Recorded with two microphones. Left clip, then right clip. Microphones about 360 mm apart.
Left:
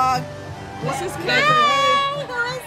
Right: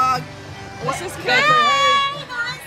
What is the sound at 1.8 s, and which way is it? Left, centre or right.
Child singing, centre.